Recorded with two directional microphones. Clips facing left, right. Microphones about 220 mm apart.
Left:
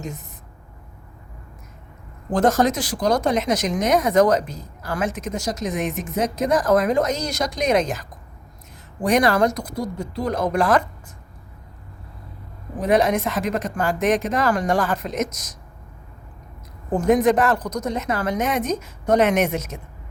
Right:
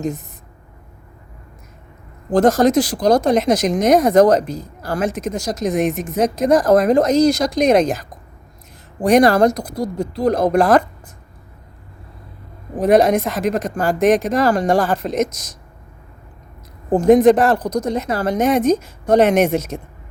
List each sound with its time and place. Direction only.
2.3 s speech: 35° right (ahead or behind)
9.0 s speech: 35° right (ahead or behind)
12.8 s speech: 40° right (ahead or behind)
16.9 s speech: 30° right (ahead or behind)